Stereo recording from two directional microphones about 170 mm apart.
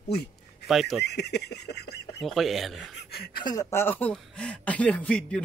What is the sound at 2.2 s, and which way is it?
Speech, centre (ahead or behind).